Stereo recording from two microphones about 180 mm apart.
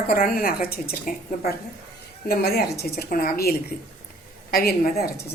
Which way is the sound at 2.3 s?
60° left (ahead or behind).